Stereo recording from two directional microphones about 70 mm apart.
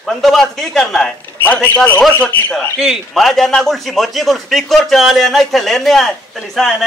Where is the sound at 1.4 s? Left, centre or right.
Left.